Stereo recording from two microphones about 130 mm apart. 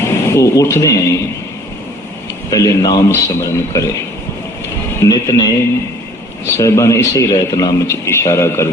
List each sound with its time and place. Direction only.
0.0 s speech: 20° left (ahead or behind)
2.5 s a man's voice: 25° left (ahead or behind)
5.0 s a man's voice: 30° left (ahead or behind)
6.5 s a man's voice: 20° left (ahead or behind)